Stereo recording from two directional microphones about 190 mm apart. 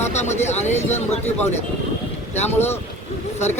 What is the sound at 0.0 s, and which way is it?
Speech, 35° left (ahead or behind).